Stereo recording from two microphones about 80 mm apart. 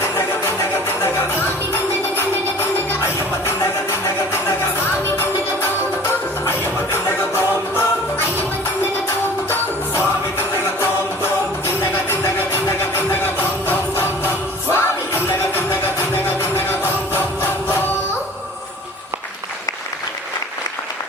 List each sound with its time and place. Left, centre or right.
0.0 s music: left
6.5 s music: left
9.5 s music: left